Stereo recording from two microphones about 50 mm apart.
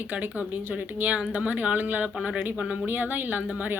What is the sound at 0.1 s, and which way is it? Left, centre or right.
Speech, right.